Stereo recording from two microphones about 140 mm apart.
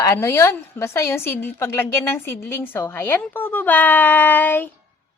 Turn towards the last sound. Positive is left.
turn(degrees=15)  # may be behind; listen again after turning